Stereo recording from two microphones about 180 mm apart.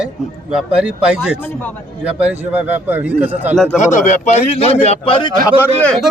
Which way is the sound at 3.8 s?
40° left (ahead or behind).